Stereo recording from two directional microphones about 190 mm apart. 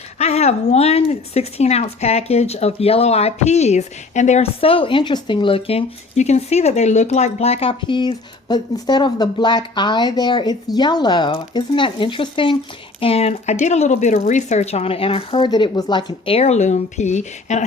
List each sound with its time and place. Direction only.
0.2 s speech: 35° left (ahead or behind)